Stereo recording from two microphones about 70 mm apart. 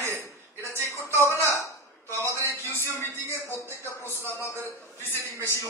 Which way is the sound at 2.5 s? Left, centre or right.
Left.